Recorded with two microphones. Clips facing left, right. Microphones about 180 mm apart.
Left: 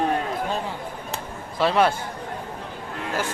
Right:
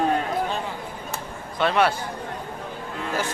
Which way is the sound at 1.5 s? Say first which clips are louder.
Left 1 dB; centre (ahead or behind).